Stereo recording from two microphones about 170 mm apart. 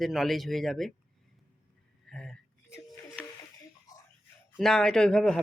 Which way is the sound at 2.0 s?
Centre (ahead or behind).